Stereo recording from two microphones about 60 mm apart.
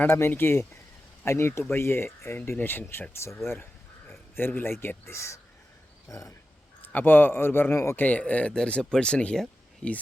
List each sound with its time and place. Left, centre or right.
0.1 s a man's voice: left
5.1 s speech: left
6.8 s a man's voice: left
8.0 s speech: left